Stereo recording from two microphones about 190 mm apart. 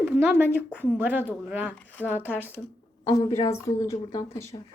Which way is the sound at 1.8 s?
10° left (ahead or behind).